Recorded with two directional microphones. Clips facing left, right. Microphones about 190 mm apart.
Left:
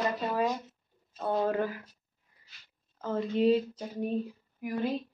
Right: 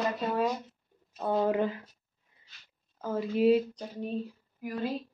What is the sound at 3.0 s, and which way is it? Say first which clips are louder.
Speech: right 1 dB; 5° right (ahead or behind).